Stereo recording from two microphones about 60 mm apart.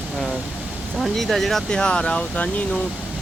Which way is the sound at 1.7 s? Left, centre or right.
Centre.